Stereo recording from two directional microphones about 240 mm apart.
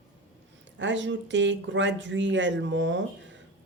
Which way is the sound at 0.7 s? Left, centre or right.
Right.